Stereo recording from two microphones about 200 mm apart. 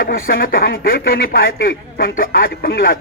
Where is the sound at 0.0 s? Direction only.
45° left (ahead or behind).